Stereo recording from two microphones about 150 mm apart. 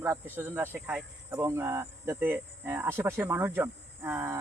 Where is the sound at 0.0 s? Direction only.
15° right (ahead or behind).